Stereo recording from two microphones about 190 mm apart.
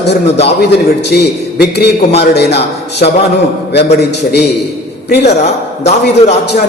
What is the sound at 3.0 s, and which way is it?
Speech, 45° left (ahead or behind).